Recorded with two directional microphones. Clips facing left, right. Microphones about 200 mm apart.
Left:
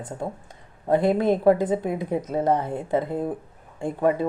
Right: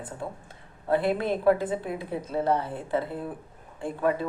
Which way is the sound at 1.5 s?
20° left (ahead or behind).